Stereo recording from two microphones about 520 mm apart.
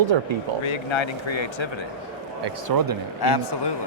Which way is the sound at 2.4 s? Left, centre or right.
Right.